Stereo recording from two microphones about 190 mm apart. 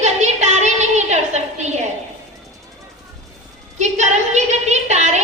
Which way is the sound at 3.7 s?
35° right (ahead or behind).